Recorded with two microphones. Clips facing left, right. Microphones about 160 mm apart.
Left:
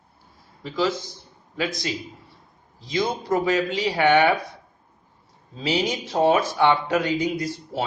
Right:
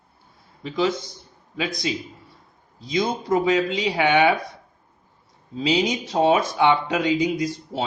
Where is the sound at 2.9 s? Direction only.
15° right (ahead or behind).